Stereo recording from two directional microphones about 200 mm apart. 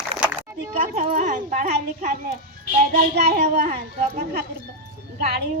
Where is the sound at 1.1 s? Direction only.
40° right (ahead or behind).